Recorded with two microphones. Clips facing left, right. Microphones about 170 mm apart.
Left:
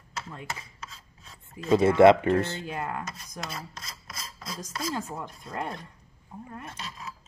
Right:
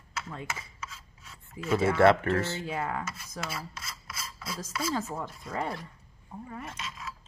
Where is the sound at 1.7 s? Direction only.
15° left (ahead or behind).